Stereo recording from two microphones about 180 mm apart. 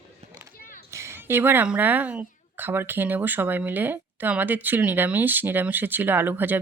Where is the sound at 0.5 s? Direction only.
50° left (ahead or behind).